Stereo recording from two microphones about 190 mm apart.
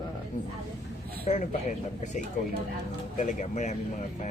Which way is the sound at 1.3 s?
40° left (ahead or behind).